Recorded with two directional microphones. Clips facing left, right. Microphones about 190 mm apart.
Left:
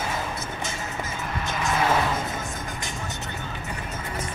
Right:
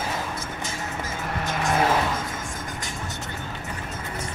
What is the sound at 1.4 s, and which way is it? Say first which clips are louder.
Vehicle: right 2 dB; 50° right (ahead or behind).